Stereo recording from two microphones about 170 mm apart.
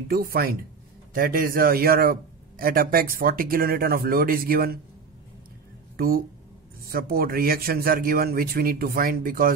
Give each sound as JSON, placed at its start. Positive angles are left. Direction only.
{"t": 0.1, "sound": "a man's voice", "side_deg": -60}
{"t": 5.9, "sound": "a man's voice", "side_deg": -60}